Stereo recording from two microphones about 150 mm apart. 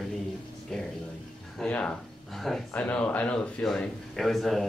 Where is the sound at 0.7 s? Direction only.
5° left (ahead or behind).